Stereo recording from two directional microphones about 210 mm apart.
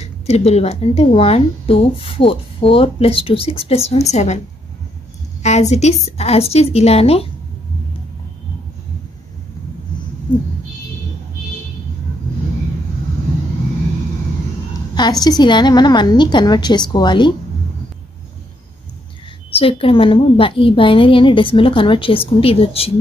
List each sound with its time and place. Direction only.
0.0 s speech: 30° left (ahead or behind)
5.4 s speech: 35° left (ahead or behind)
15.2 s speech: 20° left (ahead or behind)
19.5 s speech: 25° left (ahead or behind)